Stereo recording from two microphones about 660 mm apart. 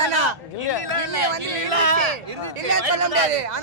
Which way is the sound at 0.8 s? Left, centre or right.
Right.